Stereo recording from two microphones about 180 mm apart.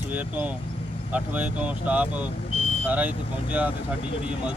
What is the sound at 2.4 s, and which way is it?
Vehicle, 35° left (ahead or behind).